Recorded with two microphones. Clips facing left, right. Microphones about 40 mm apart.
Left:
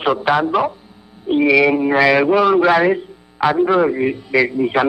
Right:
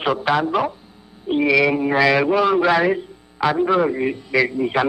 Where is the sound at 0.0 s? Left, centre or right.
Centre.